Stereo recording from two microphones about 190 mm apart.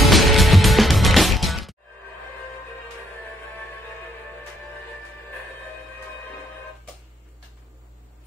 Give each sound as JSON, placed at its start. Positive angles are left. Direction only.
{"t": 0.0, "sound": "music", "side_deg": 0}